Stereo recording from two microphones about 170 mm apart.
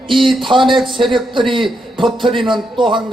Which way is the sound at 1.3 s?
30° right (ahead or behind).